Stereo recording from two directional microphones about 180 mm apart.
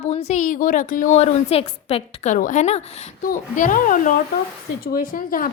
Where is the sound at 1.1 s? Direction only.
35° left (ahead or behind).